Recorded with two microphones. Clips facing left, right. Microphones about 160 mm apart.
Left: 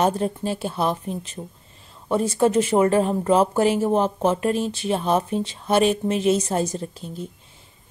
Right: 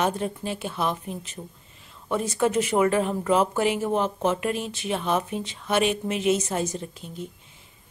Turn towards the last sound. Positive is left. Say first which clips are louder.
# left 4 dB
turn(degrees=35)  # may be behind; listen again after turning